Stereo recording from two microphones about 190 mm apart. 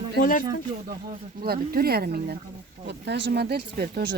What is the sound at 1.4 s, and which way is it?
Speech, 55° right (ahead or behind).